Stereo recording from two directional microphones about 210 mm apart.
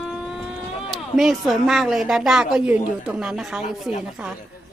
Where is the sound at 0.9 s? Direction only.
Centre (ahead or behind).